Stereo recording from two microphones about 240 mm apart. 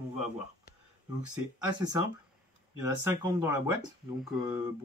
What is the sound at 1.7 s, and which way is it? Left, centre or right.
Speech, centre.